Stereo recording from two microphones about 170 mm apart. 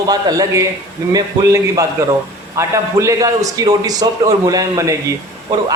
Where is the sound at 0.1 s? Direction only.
20° right (ahead or behind).